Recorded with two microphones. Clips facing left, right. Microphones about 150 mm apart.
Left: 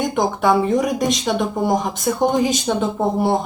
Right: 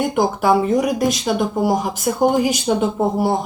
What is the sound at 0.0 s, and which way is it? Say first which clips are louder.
Speech: right 1 dB; 5° right (ahead or behind).